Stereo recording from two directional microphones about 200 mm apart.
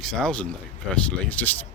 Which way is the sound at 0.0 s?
5° left (ahead or behind).